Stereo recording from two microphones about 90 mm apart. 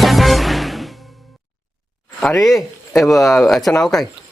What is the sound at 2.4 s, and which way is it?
Speech, centre (ahead or behind).